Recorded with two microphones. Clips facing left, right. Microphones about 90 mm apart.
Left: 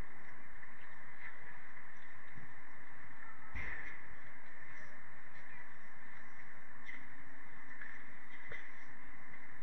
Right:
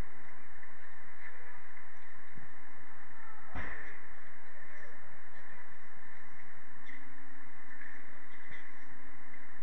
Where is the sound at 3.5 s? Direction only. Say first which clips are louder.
Right 5 dB; 60° right (ahead or behind).